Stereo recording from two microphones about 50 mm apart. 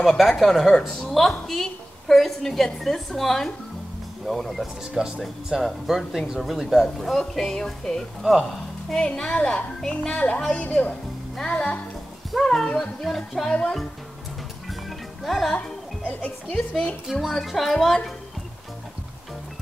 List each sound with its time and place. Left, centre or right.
0.2 s a woman's voice: centre
4.9 s speech: centre
5.2 s speech: centre
9.0 s speech: centre
9.3 s speech: left
12.3 s speech: centre
13.5 s speech: left
15.2 s speech: centre
16.5 s speech: centre
17.1 s speech: centre